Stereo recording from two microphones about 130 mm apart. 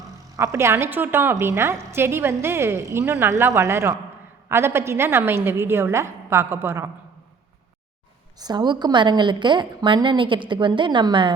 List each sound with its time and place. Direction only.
0.3 s a woman's voice: 20° right (ahead or behind)
8.4 s a woman's voice: 35° right (ahead or behind)